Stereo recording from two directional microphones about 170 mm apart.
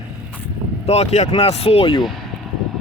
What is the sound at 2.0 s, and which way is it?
Vehicle, centre (ahead or behind).